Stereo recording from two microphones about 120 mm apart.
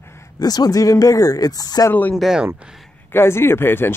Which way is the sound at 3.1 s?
20° left (ahead or behind).